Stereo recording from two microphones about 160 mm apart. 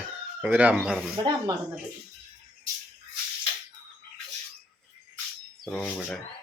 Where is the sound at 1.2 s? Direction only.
30° right (ahead or behind).